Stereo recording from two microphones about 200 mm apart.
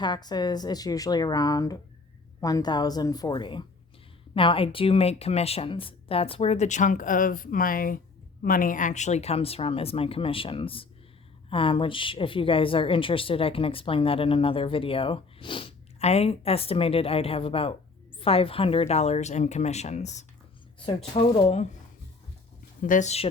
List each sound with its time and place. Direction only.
0.0 s a woman's voice: 20° left (ahead or behind)
22.8 s speech: 40° left (ahead or behind)